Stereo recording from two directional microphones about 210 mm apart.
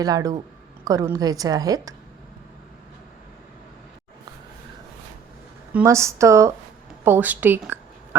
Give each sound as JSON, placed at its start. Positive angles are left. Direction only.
{"t": 0.0, "sound": "a woman's voice", "side_deg": -15}
{"t": 5.7, "sound": "a woman's voice", "side_deg": -15}